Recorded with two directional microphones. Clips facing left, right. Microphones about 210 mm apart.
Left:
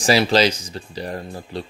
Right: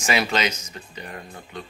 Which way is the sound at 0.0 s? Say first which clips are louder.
Left 7 dB; 35° left (ahead or behind).